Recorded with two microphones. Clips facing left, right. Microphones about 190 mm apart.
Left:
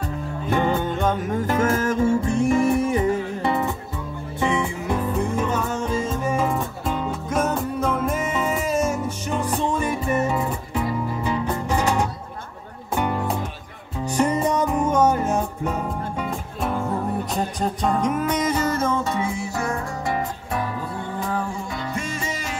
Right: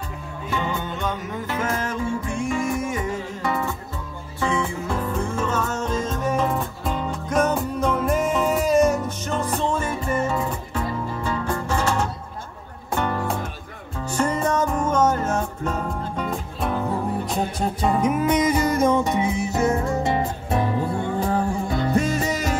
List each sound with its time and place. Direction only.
0.5 s music: 55° left (ahead or behind); by 3.5 s 35° left (ahead or behind)
4.4 s music: 20° left (ahead or behind); by 22.6 s 40° right (ahead or behind)